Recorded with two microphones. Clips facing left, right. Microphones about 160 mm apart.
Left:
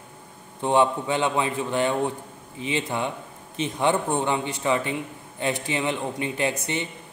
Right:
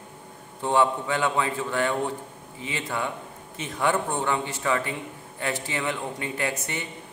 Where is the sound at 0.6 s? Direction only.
20° left (ahead or behind).